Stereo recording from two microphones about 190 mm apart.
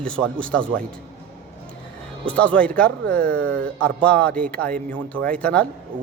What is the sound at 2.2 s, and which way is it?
A man's voice, 5° left (ahead or behind).